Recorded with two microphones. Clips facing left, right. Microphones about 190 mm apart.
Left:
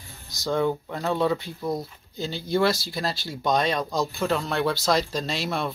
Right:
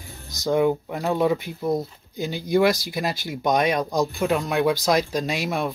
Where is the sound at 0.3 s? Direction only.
20° right (ahead or behind).